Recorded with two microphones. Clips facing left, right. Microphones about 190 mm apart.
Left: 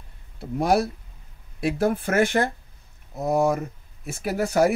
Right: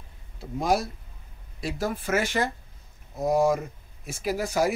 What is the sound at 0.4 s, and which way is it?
Speech, 65° left (ahead or behind).